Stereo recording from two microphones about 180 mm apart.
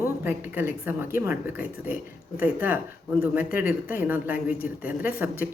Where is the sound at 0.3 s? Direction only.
10° right (ahead or behind).